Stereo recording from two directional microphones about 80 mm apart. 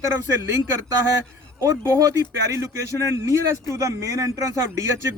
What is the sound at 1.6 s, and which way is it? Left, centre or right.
Speech, right.